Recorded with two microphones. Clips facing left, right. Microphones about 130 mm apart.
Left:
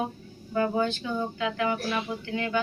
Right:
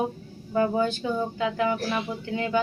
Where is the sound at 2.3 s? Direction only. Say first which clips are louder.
Right 3 dB; 25° right (ahead or behind).